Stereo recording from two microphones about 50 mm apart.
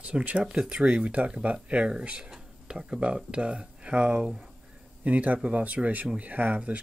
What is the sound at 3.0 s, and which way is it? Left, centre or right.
Speech, right.